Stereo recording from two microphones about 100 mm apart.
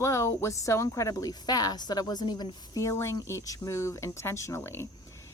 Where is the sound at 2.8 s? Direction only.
25° left (ahead or behind).